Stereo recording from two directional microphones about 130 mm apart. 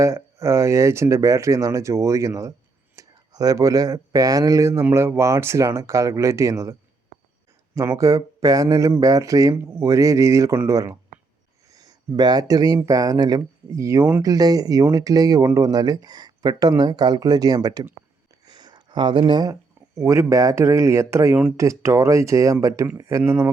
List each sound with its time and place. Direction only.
0.0 s speech: 20° right (ahead or behind)
7.8 s speech: 25° right (ahead or behind)
18.4 s a sound: 30° right (ahead or behind)
20.0 s speech: 25° right (ahead or behind)
21.3 s speech: 10° right (ahead or behind)
21.6 s speech: 25° right (ahead or behind)